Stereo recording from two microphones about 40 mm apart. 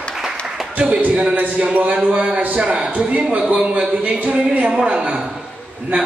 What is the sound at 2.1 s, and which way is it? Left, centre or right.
A woman's voice, right.